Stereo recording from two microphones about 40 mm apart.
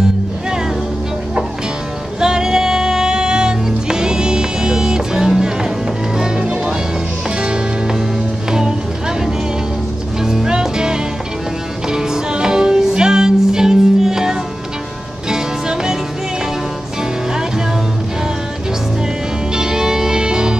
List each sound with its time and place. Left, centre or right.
2.1 s music: centre
6.5 s music: right
10.2 s music: centre
19.5 s music: centre